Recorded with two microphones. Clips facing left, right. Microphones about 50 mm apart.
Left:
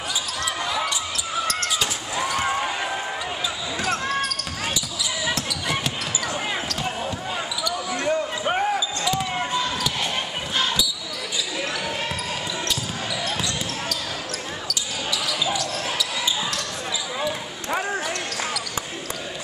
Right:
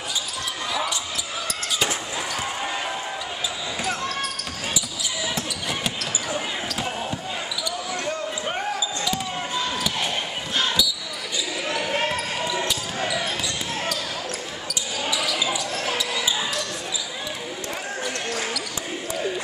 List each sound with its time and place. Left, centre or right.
6.3 s basketball bounce: centre
8.0 s basketball bounce: centre
9.1 s basketball bounce: centre
11.9 s a sound: right
15.2 s basketball bounce: centre